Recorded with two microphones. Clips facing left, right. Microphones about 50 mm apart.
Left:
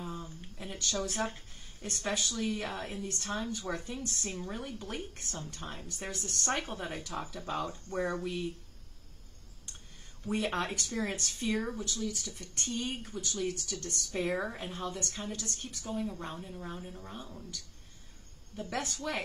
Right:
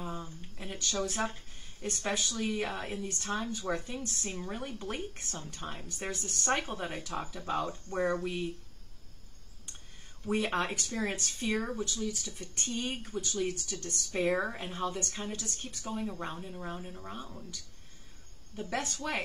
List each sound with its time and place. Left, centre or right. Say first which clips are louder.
0.0 s a sound: right 1 dB; centre
1.0 s a woman's voice: right 1 dB; centre
10.2 s a woman's voice: right 2 dB; centre
18.6 s speech: right 1 dB; centre
18.9 s a woman's voice: right 1 dB; centre